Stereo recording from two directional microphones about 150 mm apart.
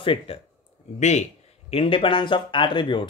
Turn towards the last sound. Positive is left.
turn(degrees=30)  # may be behind; listen again after turning